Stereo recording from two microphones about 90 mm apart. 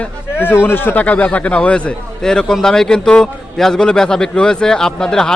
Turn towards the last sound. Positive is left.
turn(degrees=5)  # may be behind; listen again after turning